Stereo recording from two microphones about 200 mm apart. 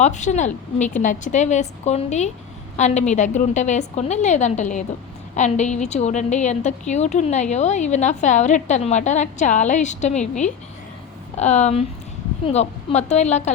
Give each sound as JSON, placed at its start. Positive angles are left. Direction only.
{"t": 0.0, "sound": "a woman's voice", "side_deg": 35}